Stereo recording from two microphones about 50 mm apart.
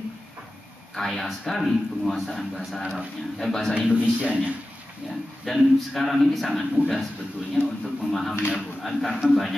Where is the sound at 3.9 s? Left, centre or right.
Right.